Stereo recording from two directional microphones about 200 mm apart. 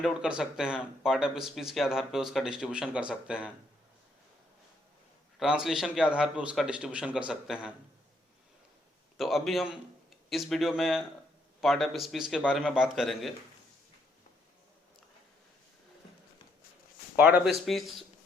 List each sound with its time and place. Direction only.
0.0 s speech: 5° right (ahead or behind)
5.4 s speech: centre (ahead or behind)
9.1 s a man's voice: centre (ahead or behind)
17.2 s speech: 5° right (ahead or behind)